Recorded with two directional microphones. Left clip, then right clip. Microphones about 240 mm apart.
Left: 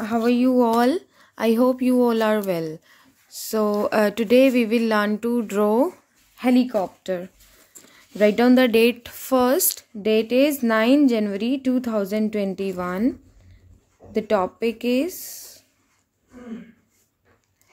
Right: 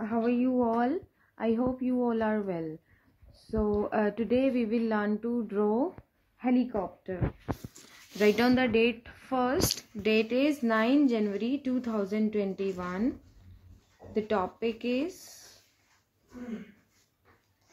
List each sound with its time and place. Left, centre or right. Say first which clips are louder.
0.0 s speech: left 8 dB; left
8.2 s speech: left 8 dB; left
14.1 s speech: left 8 dB; left